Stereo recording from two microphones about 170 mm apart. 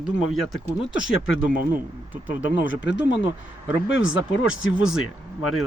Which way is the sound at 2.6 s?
90° left.